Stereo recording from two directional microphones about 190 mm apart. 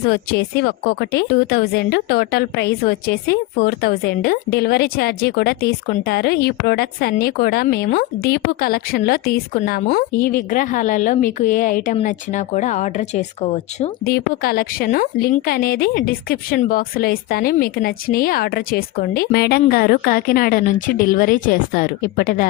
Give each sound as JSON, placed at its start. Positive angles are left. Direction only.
{"t": 0.0, "sound": "a woman's voice", "side_deg": 55}
{"t": 14.0, "sound": "a woman's voice", "side_deg": 55}